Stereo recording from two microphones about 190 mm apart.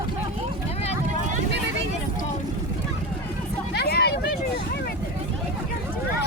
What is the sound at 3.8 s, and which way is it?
Vehicle, 60° left (ahead or behind).